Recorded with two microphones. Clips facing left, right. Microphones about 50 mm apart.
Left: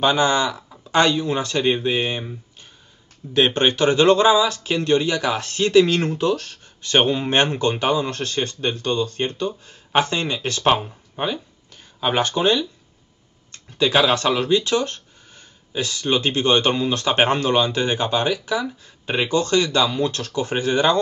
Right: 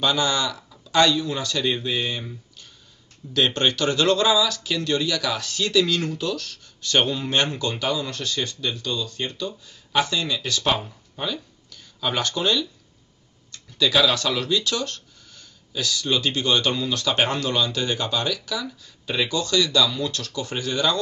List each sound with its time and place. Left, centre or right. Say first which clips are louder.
0.0 s speech: left 5 dB; left